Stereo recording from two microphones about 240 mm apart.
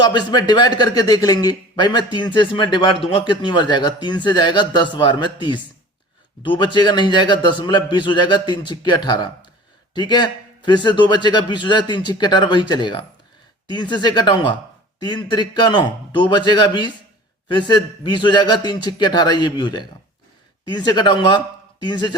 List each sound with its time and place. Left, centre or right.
0.0 s a man's voice: centre
6.7 s a man's voice: centre